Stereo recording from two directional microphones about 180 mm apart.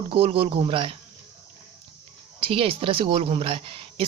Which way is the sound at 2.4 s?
30° right (ahead or behind).